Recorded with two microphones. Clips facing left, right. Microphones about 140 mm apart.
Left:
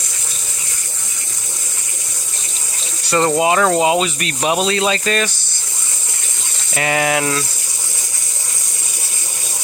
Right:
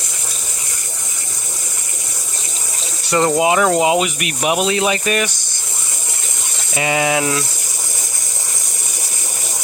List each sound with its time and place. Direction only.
3.0 s water: 20° right (ahead or behind)
3.4 s speech: 15° right (ahead or behind)
4.4 s speech: 25° left (ahead or behind)
4.6 s speech: 15° right (ahead or behind)
6.7 s speech: 15° right (ahead or behind)